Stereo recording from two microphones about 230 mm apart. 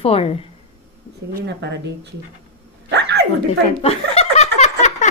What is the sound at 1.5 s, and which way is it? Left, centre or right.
Speech, right.